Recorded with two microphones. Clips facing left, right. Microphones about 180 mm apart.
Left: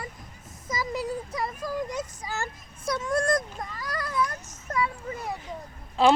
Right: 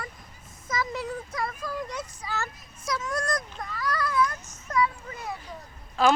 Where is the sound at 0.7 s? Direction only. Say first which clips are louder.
Left 1 dB; 35° left (ahead or behind).